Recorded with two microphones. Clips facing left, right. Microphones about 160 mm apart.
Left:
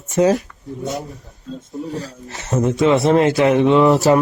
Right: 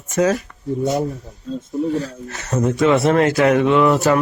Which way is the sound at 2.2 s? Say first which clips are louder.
Right 1 dB; 20° left (ahead or behind).